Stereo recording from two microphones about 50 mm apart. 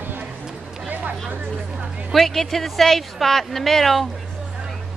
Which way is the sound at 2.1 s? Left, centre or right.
Centre.